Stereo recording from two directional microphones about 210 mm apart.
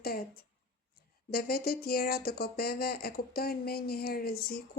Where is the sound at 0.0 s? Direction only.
45° left (ahead or behind).